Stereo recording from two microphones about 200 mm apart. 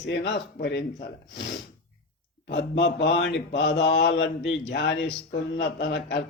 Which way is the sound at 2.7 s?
60° left (ahead or behind).